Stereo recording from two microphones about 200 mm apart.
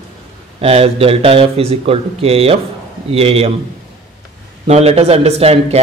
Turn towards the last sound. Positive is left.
turn(degrees=-30)  # may be behind; listen again after turning